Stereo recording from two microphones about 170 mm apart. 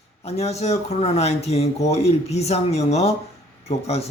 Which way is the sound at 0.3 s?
40° left (ahead or behind).